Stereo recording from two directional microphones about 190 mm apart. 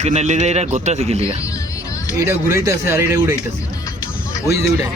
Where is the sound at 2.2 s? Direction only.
15° right (ahead or behind).